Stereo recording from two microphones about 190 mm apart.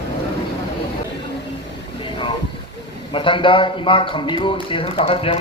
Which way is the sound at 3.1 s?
25° left (ahead or behind).